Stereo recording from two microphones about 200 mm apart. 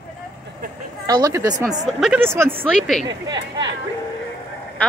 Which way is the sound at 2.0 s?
Centre (ahead or behind).